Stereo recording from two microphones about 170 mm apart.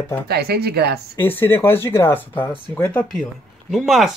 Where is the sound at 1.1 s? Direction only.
10° left (ahead or behind).